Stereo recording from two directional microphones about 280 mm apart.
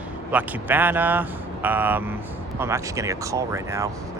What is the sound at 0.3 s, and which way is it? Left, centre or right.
Speech, centre.